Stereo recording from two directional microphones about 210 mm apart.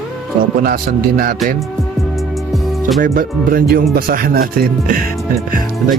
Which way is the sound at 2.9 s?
40° right (ahead or behind).